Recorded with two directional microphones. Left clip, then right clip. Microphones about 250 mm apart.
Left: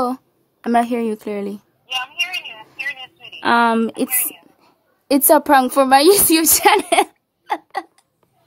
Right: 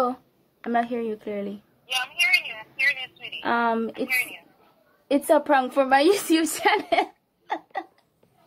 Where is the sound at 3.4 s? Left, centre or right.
Left.